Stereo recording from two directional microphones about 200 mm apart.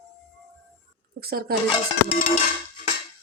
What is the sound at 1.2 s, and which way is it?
Speech, 50° right (ahead or behind).